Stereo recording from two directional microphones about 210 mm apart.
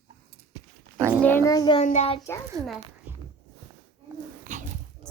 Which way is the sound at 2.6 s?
15° right (ahead or behind).